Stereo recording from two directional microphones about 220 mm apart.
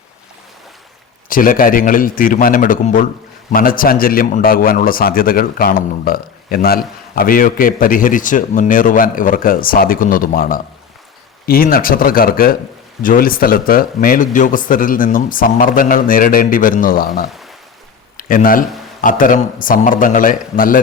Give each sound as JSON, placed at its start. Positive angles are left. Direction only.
{"t": 1.3, "sound": "a man's voice", "side_deg": 40}